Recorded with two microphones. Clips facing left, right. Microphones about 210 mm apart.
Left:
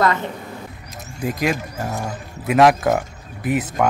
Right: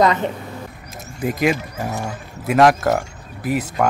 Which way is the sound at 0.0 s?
20° right (ahead or behind).